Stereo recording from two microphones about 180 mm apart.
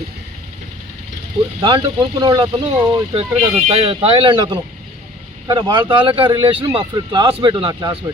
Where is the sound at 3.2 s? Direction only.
35° right (ahead or behind).